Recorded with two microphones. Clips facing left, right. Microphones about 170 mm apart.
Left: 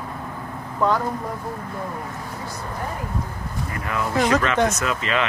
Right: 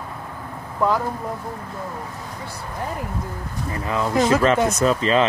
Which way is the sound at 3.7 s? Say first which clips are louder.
Right 3 dB; 25° right (ahead or behind).